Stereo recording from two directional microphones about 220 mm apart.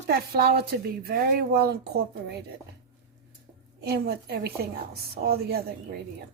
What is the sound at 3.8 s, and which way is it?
A woman's voice, 45° right (ahead or behind).